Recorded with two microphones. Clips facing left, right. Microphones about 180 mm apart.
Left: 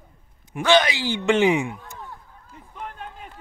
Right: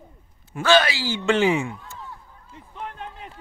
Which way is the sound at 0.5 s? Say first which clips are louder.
Even; 20° left (ahead or behind).